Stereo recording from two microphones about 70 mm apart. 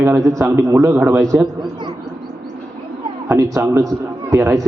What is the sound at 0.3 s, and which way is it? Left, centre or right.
A man's voice, right.